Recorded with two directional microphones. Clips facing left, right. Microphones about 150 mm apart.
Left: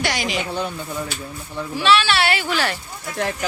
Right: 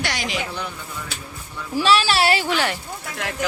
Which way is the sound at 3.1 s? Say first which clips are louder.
Left 2 dB; 35° left (ahead or behind).